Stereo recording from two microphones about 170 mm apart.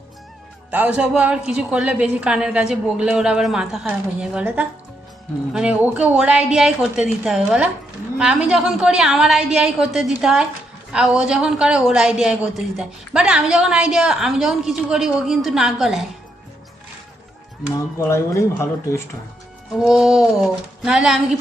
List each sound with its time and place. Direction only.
0.7 s a woman's voice: 5° right (ahead or behind)
17.7 s speech: 15° left (ahead or behind)
19.7 s a woman's voice: centre (ahead or behind)